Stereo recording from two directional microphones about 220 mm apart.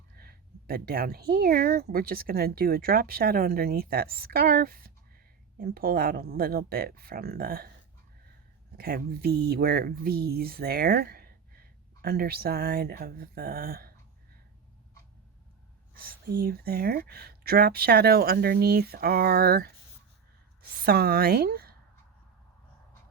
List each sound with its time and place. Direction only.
0.2 s a woman's voice: 45° right (ahead or behind)
8.8 s a woman's voice: 45° right (ahead or behind)
16.0 s a woman's voice: 45° right (ahead or behind)